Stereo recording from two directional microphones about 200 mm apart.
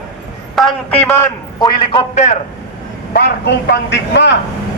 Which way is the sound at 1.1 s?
15° left (ahead or behind).